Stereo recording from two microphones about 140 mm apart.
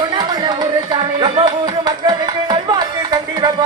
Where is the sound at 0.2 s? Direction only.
30° right (ahead or behind).